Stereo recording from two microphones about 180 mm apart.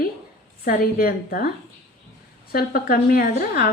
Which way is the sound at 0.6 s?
55° left (ahead or behind).